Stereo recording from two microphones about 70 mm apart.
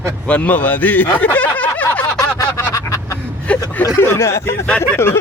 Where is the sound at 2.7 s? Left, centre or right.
Left.